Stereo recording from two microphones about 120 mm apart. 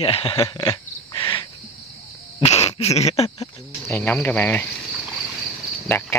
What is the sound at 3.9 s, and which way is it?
Speech, 15° left (ahead or behind).